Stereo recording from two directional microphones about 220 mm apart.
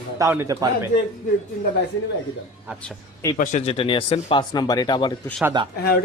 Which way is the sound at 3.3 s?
35° left (ahead or behind).